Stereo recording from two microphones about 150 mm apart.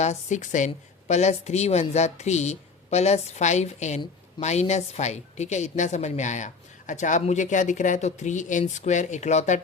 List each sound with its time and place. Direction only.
0.0 s a woman's voice: 50° left (ahead or behind)